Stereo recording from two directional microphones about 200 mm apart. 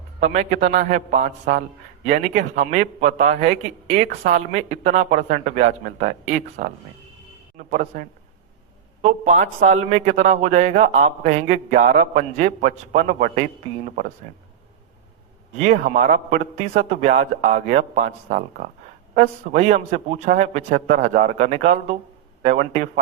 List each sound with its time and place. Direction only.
0.2 s a man's voice: 35° right (ahead or behind)
7.7 s a man's voice: 40° right (ahead or behind)
15.5 s a man's voice: 35° right (ahead or behind)